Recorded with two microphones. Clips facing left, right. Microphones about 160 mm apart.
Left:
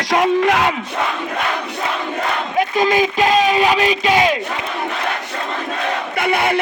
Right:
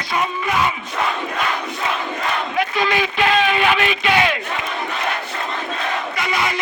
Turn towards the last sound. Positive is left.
turn(degrees=60)  # may be behind; listen again after turning